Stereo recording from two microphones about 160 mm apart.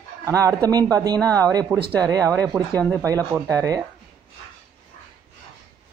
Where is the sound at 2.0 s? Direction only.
20° right (ahead or behind).